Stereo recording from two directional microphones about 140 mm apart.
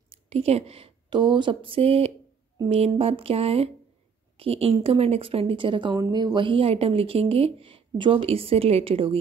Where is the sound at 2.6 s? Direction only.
45° right (ahead or behind).